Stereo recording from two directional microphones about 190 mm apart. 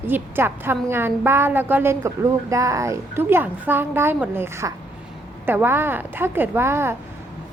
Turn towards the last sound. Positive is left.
turn(degrees=-10)  # may be behind; listen again after turning